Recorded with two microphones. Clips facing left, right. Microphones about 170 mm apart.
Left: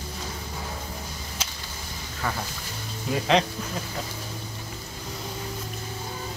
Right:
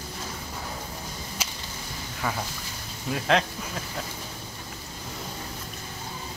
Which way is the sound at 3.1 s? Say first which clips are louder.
Left 2 dB; centre (ahead or behind).